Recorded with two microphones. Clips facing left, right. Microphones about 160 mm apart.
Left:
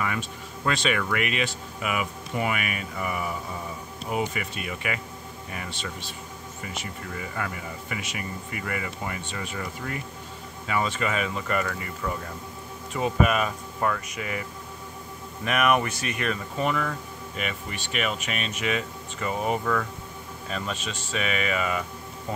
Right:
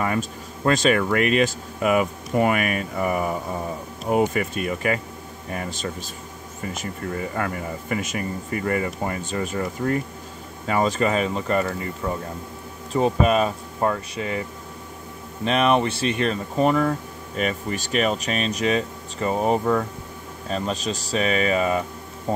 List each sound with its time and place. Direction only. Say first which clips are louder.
0.0 s speech: right 6 dB; 40° right (ahead or behind)
15.4 s speech: right 4 dB; 25° right (ahead or behind)